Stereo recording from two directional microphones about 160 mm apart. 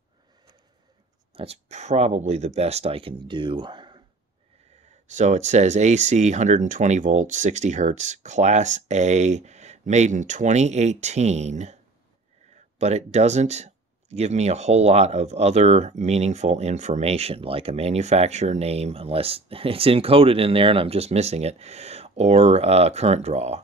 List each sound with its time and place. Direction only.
1.3 s speech: 40° right (ahead or behind)
5.0 s speech: 50° right (ahead or behind)